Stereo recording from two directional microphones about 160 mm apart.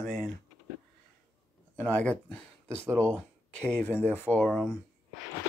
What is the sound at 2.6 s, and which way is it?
Speech, 15° right (ahead or behind).